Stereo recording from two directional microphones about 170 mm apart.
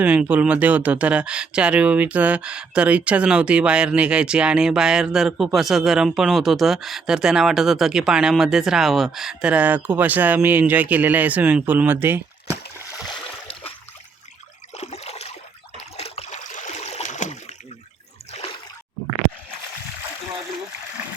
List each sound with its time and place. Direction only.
0.0 s speech: 10° right (ahead or behind)
14.8 s water: 40° left (ahead or behind)
15.8 s trickle: 35° left (ahead or behind)
18.3 s a sound: 35° left (ahead or behind)